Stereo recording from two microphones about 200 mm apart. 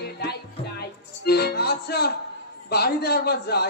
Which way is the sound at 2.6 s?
55° left (ahead or behind).